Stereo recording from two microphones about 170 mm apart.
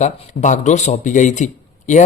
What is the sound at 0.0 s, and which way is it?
Speech, 45° left (ahead or behind).